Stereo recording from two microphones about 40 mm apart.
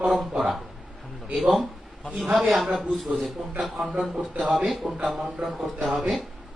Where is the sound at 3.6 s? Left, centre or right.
Centre.